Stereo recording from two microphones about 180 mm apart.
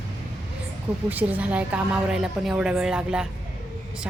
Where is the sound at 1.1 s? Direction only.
10° right (ahead or behind).